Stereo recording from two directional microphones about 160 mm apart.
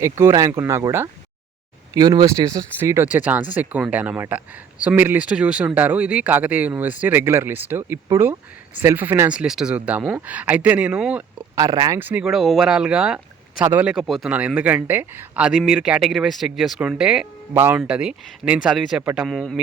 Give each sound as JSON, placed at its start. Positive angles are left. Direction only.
{"t": 0.0, "sound": "speech", "side_deg": -15}
{"t": 11.5, "sound": "speech", "side_deg": -20}
{"t": 11.9, "sound": "speech", "side_deg": -10}
{"t": 17.5, "sound": "speech", "side_deg": -15}